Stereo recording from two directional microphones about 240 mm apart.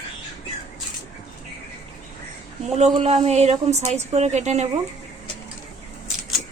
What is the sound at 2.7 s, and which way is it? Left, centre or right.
A woman's voice, right.